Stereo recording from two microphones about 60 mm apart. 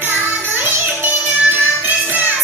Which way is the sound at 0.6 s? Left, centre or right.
Right.